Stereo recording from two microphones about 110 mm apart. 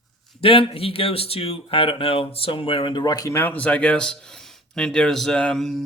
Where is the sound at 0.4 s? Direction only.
60° left (ahead or behind); by 3.3 s 35° left (ahead or behind).